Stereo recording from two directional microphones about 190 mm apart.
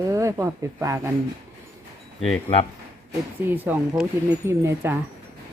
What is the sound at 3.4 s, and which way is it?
Speech, 10° right (ahead or behind).